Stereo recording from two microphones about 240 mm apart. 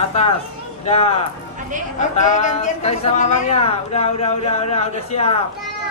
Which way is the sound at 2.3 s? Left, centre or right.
Left.